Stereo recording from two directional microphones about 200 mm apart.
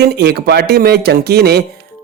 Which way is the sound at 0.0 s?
55° right (ahead or behind).